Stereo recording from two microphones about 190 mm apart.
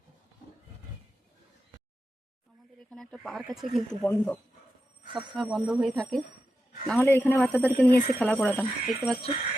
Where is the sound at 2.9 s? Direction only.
Centre (ahead or behind).